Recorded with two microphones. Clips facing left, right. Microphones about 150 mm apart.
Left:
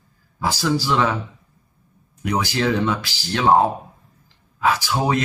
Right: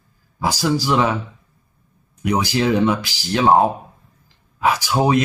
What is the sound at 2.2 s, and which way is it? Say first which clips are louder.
Speech: right 3 dB; 15° right (ahead or behind).